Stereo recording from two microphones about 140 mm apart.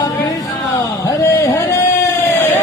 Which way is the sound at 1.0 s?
20° left (ahead or behind).